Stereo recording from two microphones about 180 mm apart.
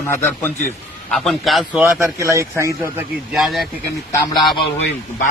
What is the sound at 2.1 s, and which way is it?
Speech, 15° right (ahead or behind).